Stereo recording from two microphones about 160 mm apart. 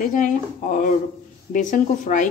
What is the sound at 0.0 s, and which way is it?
A woman's voice, 55° left (ahead or behind).